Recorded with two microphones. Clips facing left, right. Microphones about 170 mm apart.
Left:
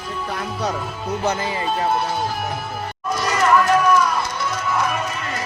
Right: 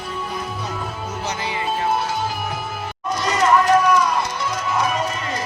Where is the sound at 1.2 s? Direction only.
45° left (ahead or behind).